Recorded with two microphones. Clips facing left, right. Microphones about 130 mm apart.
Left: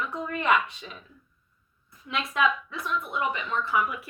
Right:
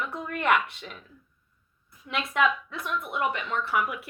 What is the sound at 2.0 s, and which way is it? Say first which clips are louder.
A woman's voice: even; 60° right (ahead or behind).